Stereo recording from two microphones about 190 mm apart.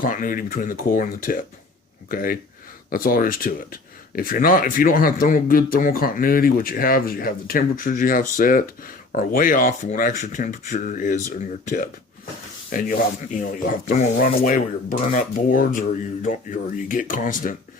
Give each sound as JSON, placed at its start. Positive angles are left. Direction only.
{"t": 0.0, "sound": "speech", "side_deg": 45}